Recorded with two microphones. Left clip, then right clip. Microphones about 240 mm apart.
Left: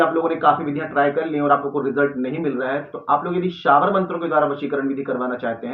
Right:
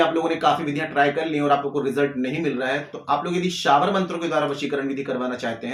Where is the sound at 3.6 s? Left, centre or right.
Right.